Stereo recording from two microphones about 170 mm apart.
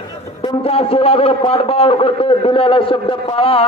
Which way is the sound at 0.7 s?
35° left (ahead or behind).